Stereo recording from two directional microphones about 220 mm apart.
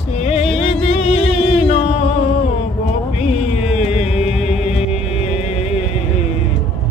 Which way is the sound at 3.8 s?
30° left (ahead or behind).